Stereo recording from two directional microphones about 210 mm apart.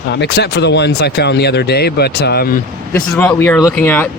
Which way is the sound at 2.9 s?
15° left (ahead or behind).